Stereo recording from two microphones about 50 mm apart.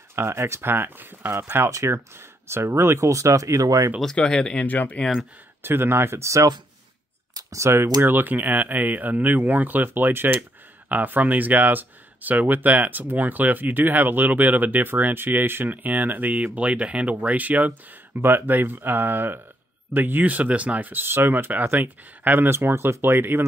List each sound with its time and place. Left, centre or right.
0.1 s speech: right
1.7 s speech: right
2.4 s speech: right
4.0 s speech: centre
4.6 s speech: left
5.6 s speech: right
7.5 s speech: right
16.5 s speech: right
18.2 s speech: right
20.9 s speech: right
21.5 s speech: right